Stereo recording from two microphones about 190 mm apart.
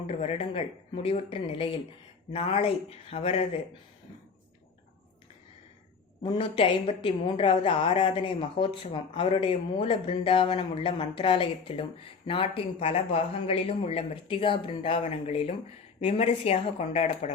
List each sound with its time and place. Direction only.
0.1 s a woman's voice: 30° left (ahead or behind)
6.2 s a woman's voice: 25° left (ahead or behind)